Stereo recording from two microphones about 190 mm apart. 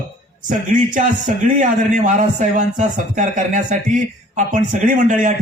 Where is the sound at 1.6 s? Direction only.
40° right (ahead or behind).